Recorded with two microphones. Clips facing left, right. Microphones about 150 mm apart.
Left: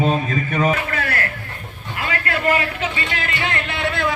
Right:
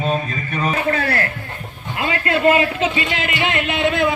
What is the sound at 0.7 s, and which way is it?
A man's voice, 30° right (ahead or behind).